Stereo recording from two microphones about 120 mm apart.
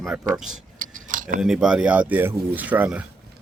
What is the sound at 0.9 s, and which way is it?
Tick-tock, 90° right.